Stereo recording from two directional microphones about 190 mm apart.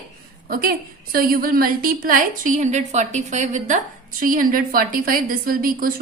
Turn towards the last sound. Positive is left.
turn(degrees=-50)  # may be behind; listen again after turning